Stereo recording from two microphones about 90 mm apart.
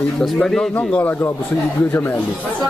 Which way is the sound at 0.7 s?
20° left (ahead or behind).